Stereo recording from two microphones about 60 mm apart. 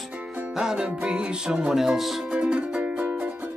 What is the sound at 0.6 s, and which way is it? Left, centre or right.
Music, centre.